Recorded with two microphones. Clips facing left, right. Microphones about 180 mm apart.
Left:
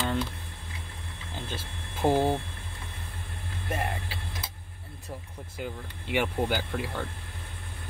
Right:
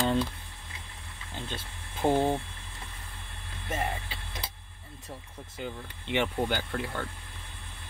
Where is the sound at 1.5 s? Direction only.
10° left (ahead or behind).